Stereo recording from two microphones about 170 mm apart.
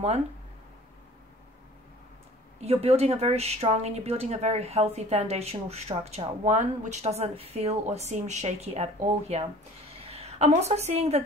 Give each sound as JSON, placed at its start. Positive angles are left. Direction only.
{"t": 2.6, "sound": "a woman's voice", "side_deg": -40}